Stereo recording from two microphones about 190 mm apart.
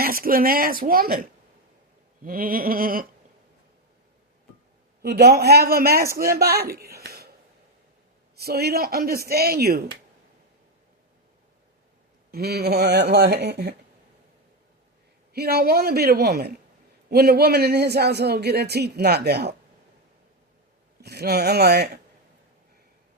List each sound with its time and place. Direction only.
0.0 s speech: 50° right (ahead or behind)
2.2 s a sound: 50° right (ahead or behind)
5.0 s a man's voice: 55° right (ahead or behind)
8.4 s a man's voice: 55° right (ahead or behind)
12.3 s a man's voice: 55° right (ahead or behind)
15.3 s a man's voice: 55° right (ahead or behind)
21.0 s a man's voice: 55° right (ahead or behind)